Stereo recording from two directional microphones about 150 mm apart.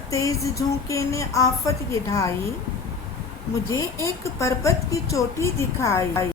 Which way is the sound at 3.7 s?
20° left (ahead or behind).